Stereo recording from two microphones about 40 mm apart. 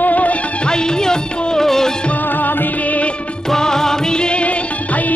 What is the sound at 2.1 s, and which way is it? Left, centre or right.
Music, left.